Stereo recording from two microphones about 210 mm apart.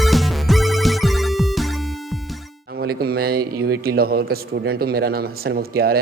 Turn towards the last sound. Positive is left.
turn(degrees=-45)  # may be behind; listen again after turning